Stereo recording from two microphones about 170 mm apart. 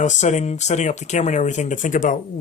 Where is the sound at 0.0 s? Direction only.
45° left (ahead or behind).